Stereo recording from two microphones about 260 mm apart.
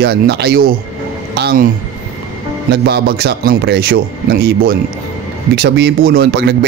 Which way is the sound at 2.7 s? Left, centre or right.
Right.